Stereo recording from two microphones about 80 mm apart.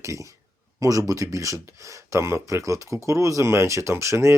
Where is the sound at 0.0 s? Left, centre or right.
Right.